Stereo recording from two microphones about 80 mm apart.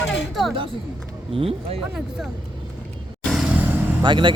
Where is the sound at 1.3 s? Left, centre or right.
Right.